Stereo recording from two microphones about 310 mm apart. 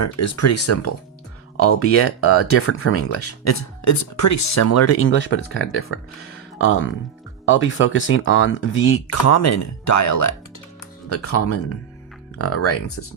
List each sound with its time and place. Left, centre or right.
0.0 s speech: left
11.1 s speech: left